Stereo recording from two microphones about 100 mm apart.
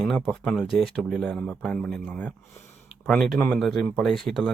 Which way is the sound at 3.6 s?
Centre (ahead or behind).